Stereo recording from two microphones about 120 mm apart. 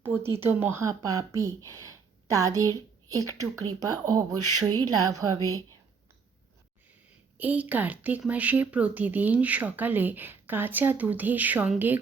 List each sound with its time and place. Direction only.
0.2 s speech: 20° right (ahead or behind)
7.3 s speech: 15° right (ahead or behind)